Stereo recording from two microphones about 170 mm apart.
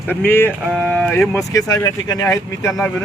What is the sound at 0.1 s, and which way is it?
Speech, 10° left (ahead or behind).